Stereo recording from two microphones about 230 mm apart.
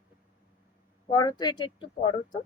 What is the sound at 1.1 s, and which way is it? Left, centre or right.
A woman's voice, centre.